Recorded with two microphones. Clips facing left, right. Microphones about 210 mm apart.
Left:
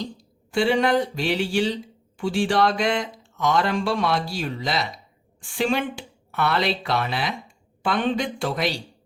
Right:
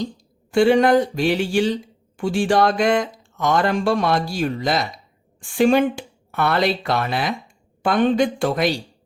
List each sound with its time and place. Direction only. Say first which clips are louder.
0.5 s speech: right 6 dB; 45° right (ahead or behind)